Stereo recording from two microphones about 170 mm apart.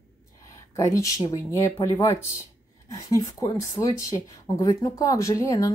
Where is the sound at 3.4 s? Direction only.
20° left (ahead or behind).